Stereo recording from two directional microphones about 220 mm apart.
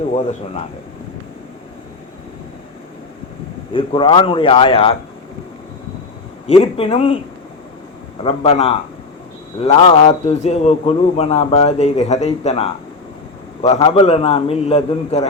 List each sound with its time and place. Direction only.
0.1 s a man's voice: 30° left (ahead or behind)
3.7 s a man's voice: 25° left (ahead or behind)
6.5 s a man's voice: 25° left (ahead or behind)
8.2 s a man's voice: 25° left (ahead or behind)